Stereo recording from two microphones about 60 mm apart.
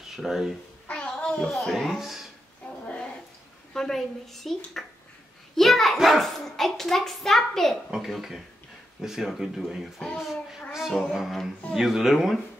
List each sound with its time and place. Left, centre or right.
0.0 s speech: centre
0.8 s child singing: centre
1.5 s a child's voice: centre
2.6 s a sound: left
3.7 s a child's voice: centre
5.6 s a child's voice: centre